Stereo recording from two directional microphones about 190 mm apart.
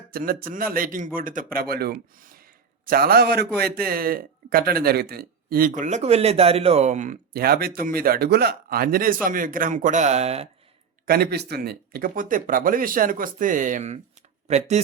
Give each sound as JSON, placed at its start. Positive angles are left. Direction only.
{"t": 0.1, "sound": "speech", "side_deg": -50}
{"t": 11.0, "sound": "speech", "side_deg": -55}